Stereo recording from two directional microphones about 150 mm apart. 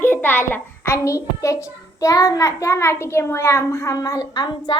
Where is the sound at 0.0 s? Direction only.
15° left (ahead or behind).